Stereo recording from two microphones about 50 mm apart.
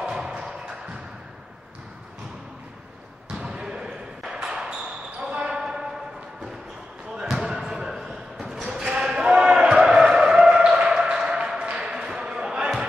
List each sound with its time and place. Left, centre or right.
0.0 s music: centre
3.3 s basketball bounce: centre
7.2 s basketball bounce: centre
8.8 s a sound: centre
11.8 s basketball bounce: centre